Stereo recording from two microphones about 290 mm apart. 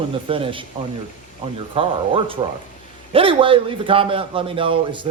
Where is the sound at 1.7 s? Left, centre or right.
Centre.